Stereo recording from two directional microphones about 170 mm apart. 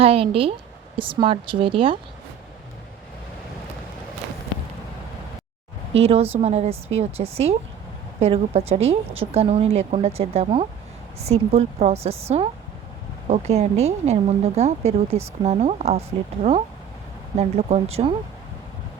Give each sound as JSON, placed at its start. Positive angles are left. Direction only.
{"t": 0.0, "sound": "speech", "side_deg": -35}
{"t": 6.0, "sound": "speech", "side_deg": -35}